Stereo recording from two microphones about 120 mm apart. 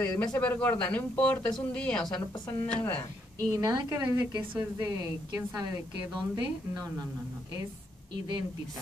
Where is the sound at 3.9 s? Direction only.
25° right (ahead or behind).